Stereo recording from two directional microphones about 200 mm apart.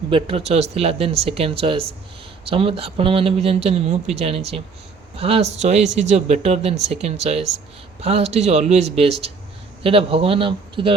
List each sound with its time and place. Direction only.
0.1 s speech: 30° right (ahead or behind)